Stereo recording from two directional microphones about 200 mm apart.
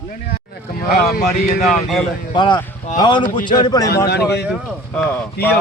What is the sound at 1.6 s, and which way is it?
Speech, centre (ahead or behind).